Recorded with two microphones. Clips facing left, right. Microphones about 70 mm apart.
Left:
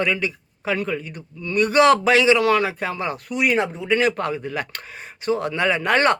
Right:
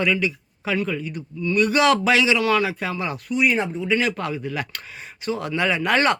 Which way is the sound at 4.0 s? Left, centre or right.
Left.